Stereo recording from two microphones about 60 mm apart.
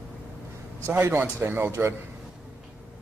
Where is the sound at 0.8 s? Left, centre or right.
Right.